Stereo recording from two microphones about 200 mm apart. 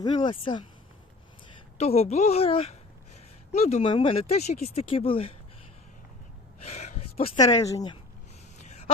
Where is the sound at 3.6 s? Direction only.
30° left (ahead or behind).